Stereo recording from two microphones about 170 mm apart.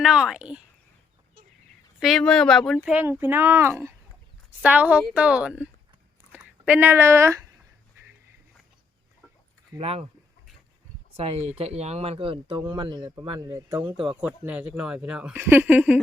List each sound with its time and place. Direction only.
0.0 s speech: 5° right (ahead or behind)
2.0 s speech: centre (ahead or behind); by 7.4 s 15° right (ahead or behind)
9.7 s speech: 35° right (ahead or behind)
11.2 s a man's voice: 35° right (ahead or behind); by 13.9 s 10° right (ahead or behind)
13.9 s a man's voice: 30° right (ahead or behind)
14.2 s speech: 10° right (ahead or behind)